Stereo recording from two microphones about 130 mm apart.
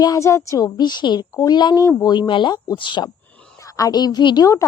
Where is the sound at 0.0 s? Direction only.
25° left (ahead or behind).